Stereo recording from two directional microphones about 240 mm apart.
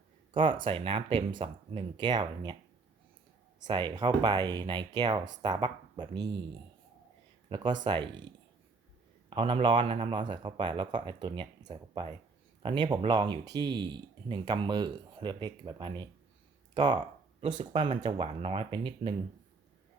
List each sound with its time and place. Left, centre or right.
0.6 s speech: right
3.7 s speech: centre
7.5 s speech: centre
9.3 s speech: right
17.4 s speech: right